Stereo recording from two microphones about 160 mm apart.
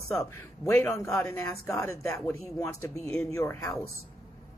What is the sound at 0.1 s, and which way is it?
Speech, 20° left (ahead or behind).